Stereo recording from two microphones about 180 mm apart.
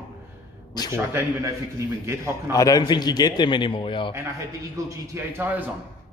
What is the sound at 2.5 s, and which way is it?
A man's voice, 20° left (ahead or behind).